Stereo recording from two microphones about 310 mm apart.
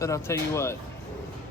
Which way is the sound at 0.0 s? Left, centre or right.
Centre.